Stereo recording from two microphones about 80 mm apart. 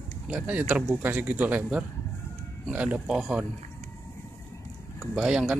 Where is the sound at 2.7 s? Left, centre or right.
Centre.